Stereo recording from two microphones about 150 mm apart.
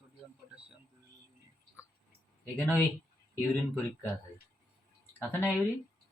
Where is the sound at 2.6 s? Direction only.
15° left (ahead or behind).